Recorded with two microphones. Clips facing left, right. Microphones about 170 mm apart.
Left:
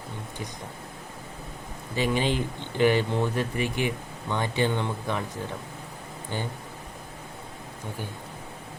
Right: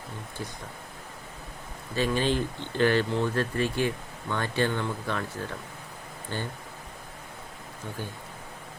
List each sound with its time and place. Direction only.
2.0 s speech: 15° left (ahead or behind)